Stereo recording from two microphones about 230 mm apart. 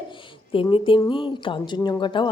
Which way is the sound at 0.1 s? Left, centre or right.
Left.